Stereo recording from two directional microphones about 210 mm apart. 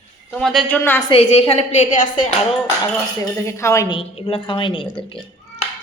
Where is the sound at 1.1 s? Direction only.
30° left (ahead or behind).